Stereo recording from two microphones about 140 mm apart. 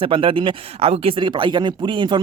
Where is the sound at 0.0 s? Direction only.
40° right (ahead or behind).